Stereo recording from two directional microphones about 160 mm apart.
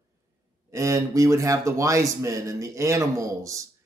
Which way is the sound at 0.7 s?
20° right (ahead or behind).